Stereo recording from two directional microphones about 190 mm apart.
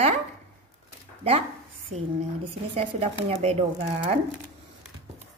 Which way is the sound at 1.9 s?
35° right (ahead or behind).